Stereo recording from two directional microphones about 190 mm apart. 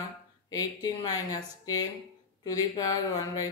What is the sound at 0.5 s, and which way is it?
Speech, 20° left (ahead or behind).